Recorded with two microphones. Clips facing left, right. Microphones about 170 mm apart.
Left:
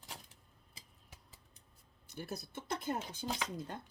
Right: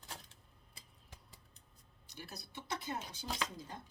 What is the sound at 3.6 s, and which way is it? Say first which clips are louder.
Speech: left 5 dB; 60° left (ahead or behind).